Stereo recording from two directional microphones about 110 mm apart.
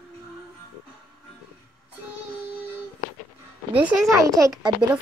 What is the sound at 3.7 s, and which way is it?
Speech, 15° right (ahead or behind).